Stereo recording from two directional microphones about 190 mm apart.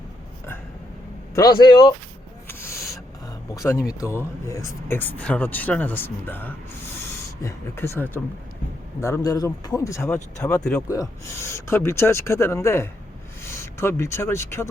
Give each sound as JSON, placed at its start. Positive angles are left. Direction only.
{"t": 1.4, "sound": "speech", "side_deg": 20}
{"t": 2.5, "sound": "a sound", "side_deg": 15}
{"t": 4.4, "sound": "speech", "side_deg": 15}
{"t": 10.8, "sound": "speech", "side_deg": 15}